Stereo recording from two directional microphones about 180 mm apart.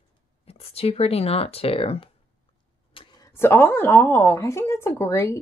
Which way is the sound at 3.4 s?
10° left (ahead or behind).